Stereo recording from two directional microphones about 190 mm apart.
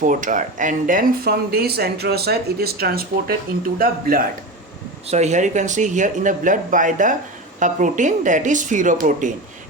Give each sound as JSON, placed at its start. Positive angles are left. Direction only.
{"t": 0.0, "sound": "speech", "side_deg": -45}
{"t": 5.0, "sound": "speech", "side_deg": -35}